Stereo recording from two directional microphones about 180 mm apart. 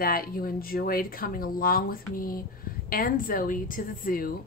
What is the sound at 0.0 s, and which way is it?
Speech, 55° left (ahead or behind).